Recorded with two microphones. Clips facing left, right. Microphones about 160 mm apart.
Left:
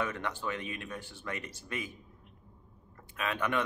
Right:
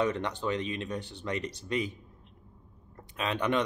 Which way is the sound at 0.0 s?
20° right (ahead or behind).